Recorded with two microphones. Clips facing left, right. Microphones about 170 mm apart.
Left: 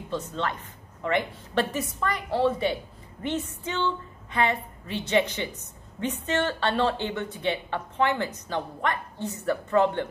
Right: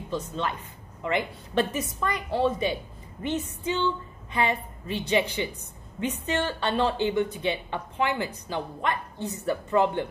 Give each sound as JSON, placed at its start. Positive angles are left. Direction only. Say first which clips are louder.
{"t": 0.1, "sound": "a woman's voice", "louder": "even", "side_deg": -15}